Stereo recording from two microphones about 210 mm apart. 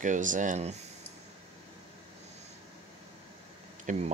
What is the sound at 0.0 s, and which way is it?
Speech, 35° right (ahead or behind).